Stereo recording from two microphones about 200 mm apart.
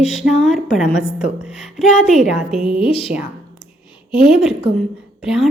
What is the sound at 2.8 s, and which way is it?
Speech, 30° left (ahead or behind).